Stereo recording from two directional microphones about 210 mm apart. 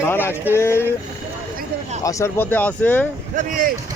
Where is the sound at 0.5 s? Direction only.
10° left (ahead or behind).